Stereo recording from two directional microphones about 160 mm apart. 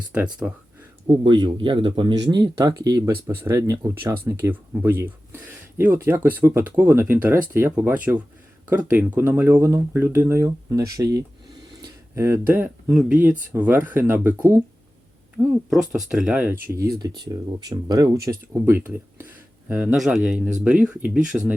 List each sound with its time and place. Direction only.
0.1 s speech: 10° right (ahead or behind)
1.2 s speech: 30° right (ahead or behind)
11.8 s a sound: 15° right (ahead or behind)
12.5 s speech: 5° right (ahead or behind)
15.4 s speech: 5° right (ahead or behind)
17.2 s speech: 25° right (ahead or behind); by 21.2 s 5° right (ahead or behind)